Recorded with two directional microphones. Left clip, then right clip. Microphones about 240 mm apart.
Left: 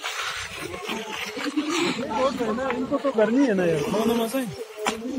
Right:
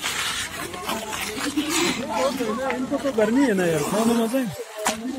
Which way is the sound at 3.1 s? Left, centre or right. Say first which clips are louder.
Right 1 dB; right.